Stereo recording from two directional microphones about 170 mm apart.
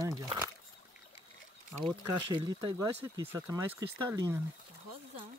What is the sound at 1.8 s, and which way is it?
Speech, 25° right (ahead or behind).